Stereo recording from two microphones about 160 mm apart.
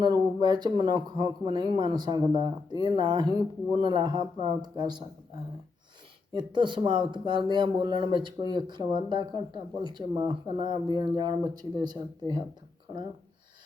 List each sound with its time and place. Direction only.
0.0 s speech: 25° right (ahead or behind)
6.3 s speech: 30° right (ahead or behind)